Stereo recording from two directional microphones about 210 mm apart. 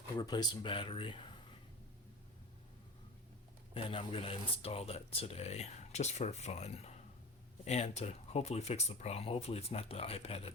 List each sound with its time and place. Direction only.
0.2 s speech: 20° left (ahead or behind)
3.8 s speech: 25° left (ahead or behind)